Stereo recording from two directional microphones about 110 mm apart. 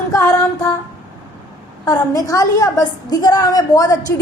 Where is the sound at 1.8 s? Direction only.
35° left (ahead or behind).